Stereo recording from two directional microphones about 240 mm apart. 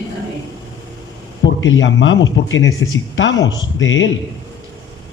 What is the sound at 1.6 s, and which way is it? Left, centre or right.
Speech, left.